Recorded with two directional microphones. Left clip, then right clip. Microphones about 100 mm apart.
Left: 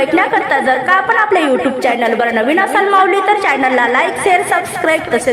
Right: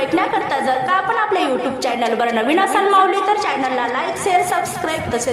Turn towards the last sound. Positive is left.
turn(degrees=35)  # may be behind; listen again after turning